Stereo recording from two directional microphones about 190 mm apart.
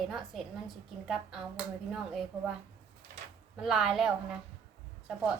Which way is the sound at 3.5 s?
5° right (ahead or behind).